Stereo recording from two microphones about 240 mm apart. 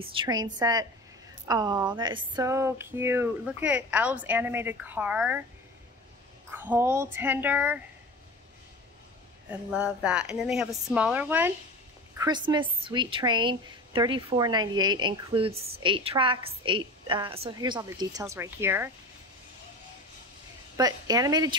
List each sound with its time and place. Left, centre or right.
0.0 s speech: right
6.5 s speech: centre
9.7 s a woman's voice: centre
12.2 s a woman's voice: centre
20.7 s speech: centre